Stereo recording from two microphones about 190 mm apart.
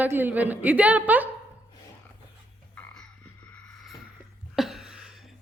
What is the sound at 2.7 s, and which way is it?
Frog, 10° left (ahead or behind).